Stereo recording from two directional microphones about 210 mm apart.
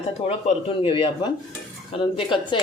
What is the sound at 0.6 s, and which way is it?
Speech, 25° left (ahead or behind).